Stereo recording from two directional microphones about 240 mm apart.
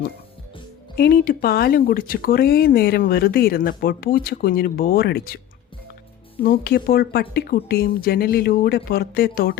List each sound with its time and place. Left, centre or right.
0.9 s speech: left
6.4 s speech: left